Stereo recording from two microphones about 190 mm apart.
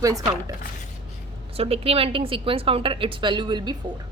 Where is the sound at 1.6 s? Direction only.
30° right (ahead or behind).